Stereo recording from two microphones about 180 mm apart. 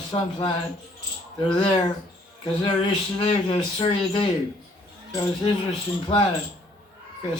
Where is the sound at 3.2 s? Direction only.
30° left (ahead or behind).